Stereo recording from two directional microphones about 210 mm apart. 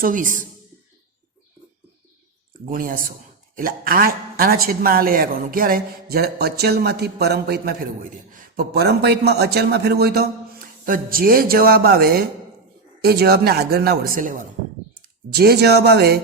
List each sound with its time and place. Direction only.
0.0 s speech: 40° right (ahead or behind)
2.6 s a woman's voice: 40° right (ahead or behind)